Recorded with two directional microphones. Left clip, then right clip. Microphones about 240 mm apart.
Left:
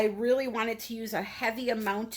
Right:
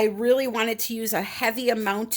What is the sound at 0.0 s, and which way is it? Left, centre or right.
Speech, right.